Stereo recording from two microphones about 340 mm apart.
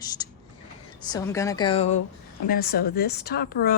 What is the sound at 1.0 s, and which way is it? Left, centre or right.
A woman's voice, centre.